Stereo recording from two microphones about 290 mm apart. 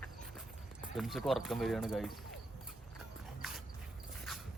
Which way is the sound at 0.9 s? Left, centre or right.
Centre.